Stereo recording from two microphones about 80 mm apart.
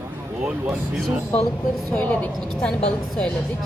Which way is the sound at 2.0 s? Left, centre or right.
Centre.